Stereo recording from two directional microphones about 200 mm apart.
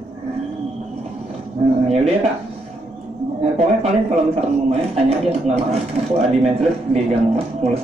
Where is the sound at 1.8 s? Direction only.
30° right (ahead or behind).